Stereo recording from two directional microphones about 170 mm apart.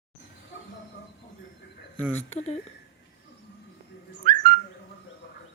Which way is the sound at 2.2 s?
40° left (ahead or behind).